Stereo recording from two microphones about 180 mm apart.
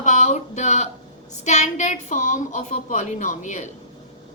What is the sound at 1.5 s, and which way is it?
A woman's voice, 40° left (ahead or behind).